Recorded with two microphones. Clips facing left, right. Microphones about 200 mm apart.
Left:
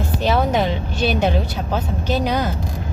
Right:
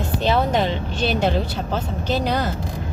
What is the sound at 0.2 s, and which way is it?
Speech, 10° left (ahead or behind).